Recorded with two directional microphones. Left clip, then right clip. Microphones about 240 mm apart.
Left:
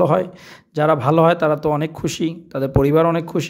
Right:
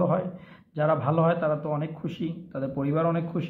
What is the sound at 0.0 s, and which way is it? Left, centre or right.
Speech, left.